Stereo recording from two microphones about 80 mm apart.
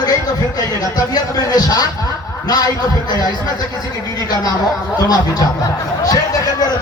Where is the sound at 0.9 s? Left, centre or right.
Left.